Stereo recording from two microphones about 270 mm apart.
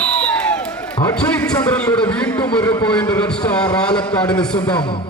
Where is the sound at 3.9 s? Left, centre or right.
Centre.